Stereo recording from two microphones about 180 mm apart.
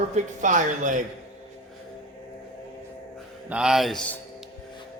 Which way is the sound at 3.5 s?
5° right (ahead or behind).